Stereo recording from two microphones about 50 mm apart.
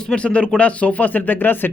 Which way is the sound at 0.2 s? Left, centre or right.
Left.